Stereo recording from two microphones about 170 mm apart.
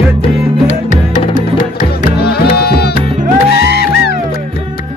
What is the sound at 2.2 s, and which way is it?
Music, 65° left (ahead or behind).